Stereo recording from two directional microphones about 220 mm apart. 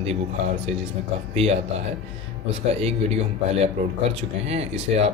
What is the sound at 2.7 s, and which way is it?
Speech, 30° right (ahead or behind).